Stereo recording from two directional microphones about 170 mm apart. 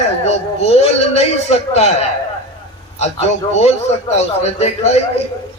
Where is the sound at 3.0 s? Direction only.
40° left (ahead or behind).